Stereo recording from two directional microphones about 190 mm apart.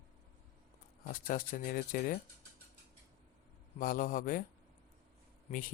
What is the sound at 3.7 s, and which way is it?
Speech, 45° left (ahead or behind).